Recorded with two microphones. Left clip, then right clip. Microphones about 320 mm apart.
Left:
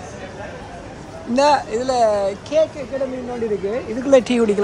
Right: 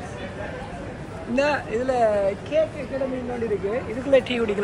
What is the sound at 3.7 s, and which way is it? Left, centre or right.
Speech, left.